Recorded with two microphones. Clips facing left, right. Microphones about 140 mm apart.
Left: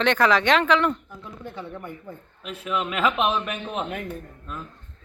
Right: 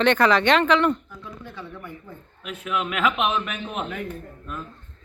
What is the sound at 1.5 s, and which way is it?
Speech, 25° left (ahead or behind).